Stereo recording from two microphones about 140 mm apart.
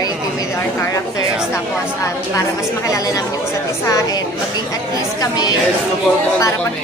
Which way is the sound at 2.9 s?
25° left (ahead or behind).